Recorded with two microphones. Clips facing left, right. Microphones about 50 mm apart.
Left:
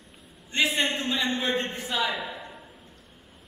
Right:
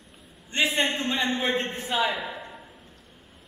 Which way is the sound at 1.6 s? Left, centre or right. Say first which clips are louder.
Right 2 dB; centre.